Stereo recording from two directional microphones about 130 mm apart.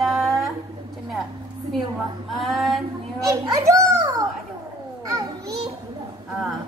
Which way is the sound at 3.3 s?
25° right (ahead or behind).